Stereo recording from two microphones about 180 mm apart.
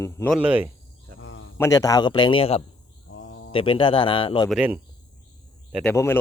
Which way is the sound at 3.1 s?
90° left.